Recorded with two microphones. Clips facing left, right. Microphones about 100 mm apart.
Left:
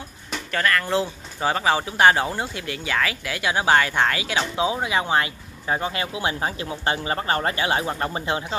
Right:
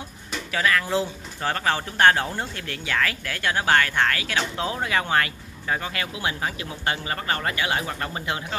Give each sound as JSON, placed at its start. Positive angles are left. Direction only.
{"t": 0.5, "sound": "speech", "side_deg": -5}
{"t": 1.4, "sound": "speech", "side_deg": 10}